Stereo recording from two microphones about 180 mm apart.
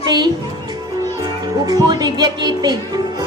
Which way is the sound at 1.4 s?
20° right (ahead or behind).